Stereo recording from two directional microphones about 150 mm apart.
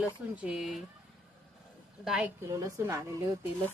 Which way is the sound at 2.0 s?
5° right (ahead or behind).